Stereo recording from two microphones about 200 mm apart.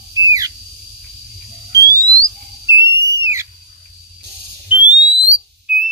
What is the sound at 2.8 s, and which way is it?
Whistle, 55° right (ahead or behind).